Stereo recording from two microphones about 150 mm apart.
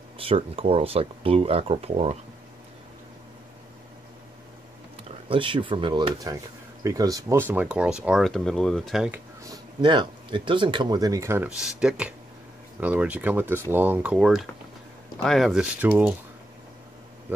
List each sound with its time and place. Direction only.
0.2 s speech: 40° right (ahead or behind)
4.9 s speech: 35° right (ahead or behind); by 9.2 s 5° right (ahead or behind)
9.4 s speech: 25° right (ahead or behind)
11.4 s speech: 5° right (ahead or behind)
15.8 s speech: 10° right (ahead or behind)